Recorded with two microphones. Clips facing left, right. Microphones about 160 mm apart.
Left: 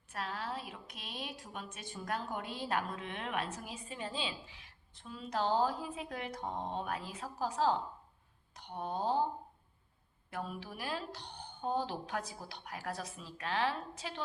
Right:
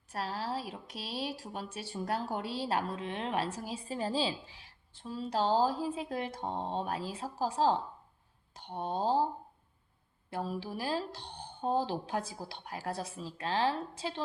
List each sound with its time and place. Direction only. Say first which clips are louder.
0.1 s a woman's voice: right 4 dB; 35° right (ahead or behind)
10.2 s a woman's voice: right 5 dB; 30° right (ahead or behind)